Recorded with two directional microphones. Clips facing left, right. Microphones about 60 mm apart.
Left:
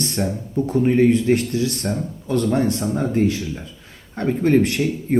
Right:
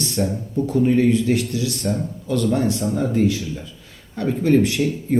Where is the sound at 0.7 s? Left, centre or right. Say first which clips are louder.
Left 1 dB; left.